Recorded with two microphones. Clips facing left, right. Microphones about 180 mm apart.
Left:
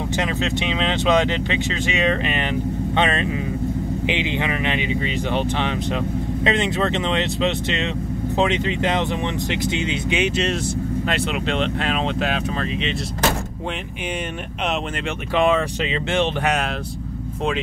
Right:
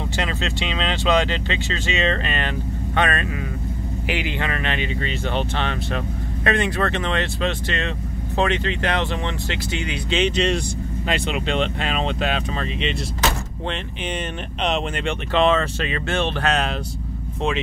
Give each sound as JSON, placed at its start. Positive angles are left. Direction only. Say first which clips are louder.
{"t": 0.2, "sound": "speech", "louder": "left 2 dB", "side_deg": 15}
{"t": 10.2, "sound": "speech", "louder": "right 1 dB", "side_deg": 5}
{"t": 15.3, "sound": "speech", "louder": "even", "side_deg": 10}